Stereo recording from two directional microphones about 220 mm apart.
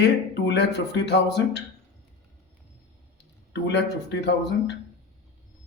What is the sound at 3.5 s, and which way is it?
Speech, 50° left (ahead or behind).